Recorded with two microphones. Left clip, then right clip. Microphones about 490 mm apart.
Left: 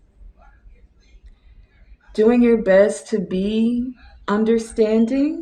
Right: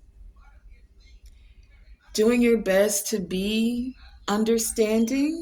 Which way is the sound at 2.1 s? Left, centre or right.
Right.